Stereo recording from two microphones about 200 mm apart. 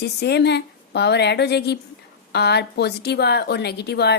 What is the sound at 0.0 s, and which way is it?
A woman's voice, 55° left (ahead or behind).